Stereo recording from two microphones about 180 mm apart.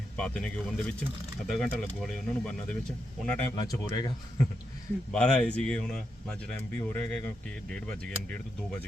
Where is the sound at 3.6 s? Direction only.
25° left (ahead or behind).